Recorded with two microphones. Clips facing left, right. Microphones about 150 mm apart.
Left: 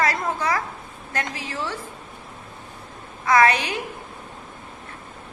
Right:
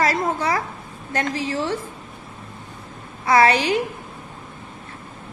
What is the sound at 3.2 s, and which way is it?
Speech, 30° right (ahead or behind).